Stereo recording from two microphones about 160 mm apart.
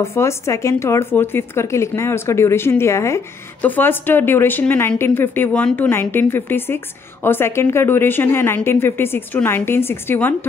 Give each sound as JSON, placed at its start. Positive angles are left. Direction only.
{"t": 0.0, "sound": "a woman's voice", "side_deg": 15}